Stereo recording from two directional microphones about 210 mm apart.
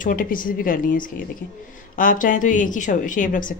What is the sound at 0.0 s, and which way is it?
A woman's voice, 40° left (ahead or behind).